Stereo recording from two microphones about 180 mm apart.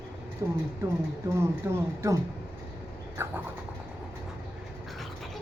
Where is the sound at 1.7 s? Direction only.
15° right (ahead or behind).